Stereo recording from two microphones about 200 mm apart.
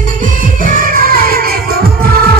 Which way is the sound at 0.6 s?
45° right (ahead or behind).